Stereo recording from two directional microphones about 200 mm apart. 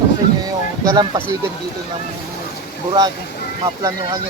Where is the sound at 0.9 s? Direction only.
20° right (ahead or behind).